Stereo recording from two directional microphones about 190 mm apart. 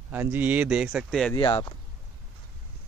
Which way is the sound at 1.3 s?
25° left (ahead or behind).